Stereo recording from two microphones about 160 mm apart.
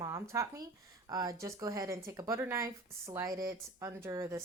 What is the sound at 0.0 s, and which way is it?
Speech, 20° right (ahead or behind).